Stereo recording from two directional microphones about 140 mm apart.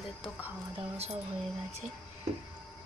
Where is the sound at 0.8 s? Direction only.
50° right (ahead or behind).